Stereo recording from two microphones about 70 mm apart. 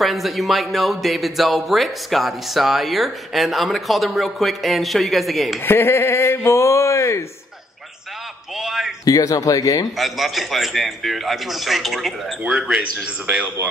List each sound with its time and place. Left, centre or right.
0.0 s speech: centre
5.7 s speech: left
8.5 s a sound: centre
9.0 s speech: left
9.9 s speech: centre
12.5 s speech: centre